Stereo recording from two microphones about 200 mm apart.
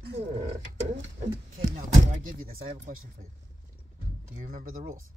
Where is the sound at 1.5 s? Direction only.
40° right (ahead or behind).